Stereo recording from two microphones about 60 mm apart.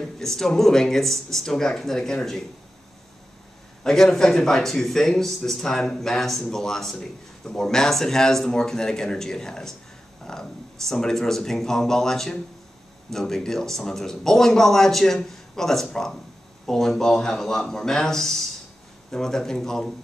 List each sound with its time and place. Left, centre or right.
0.2 s speech: centre
3.8 s speech: centre